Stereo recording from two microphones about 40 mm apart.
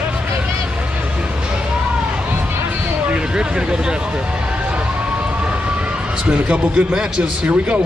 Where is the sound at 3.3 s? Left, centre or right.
Right.